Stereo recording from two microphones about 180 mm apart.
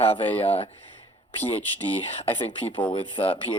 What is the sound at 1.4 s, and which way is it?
Speech, 10° left (ahead or behind).